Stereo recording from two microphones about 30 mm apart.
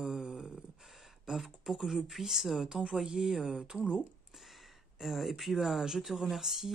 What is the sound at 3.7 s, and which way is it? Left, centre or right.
Speech, right.